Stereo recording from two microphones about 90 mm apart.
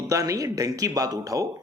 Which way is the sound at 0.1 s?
40° right (ahead or behind).